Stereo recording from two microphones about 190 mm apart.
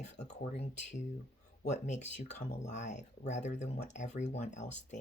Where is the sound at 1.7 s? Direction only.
40° left (ahead or behind).